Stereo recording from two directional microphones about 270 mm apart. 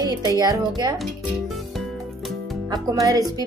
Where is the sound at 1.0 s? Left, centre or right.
Centre.